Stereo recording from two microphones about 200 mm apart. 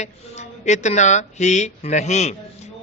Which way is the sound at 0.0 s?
35° left (ahead or behind).